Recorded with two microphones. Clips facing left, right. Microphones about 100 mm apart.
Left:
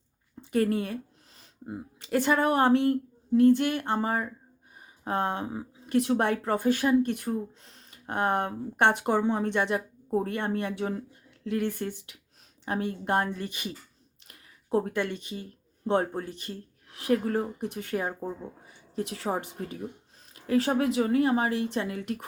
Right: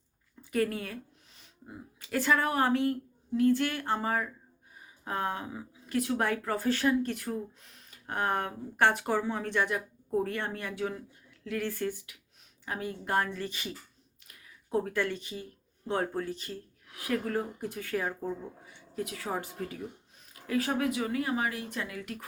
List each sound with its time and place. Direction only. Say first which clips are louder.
0.5 s speech: left 4 dB; 30° left (ahead or behind)
6.6 s speech: left 4 dB; 15° left (ahead or behind)
7.6 s speech: left 3 dB; 30° left (ahead or behind)
12.6 s speech: left 6 dB; 30° left (ahead or behind)
14.3 s a sound: left 8 dB; 35° left (ahead or behind)
14.9 s speech: left 1 dB; 20° left (ahead or behind)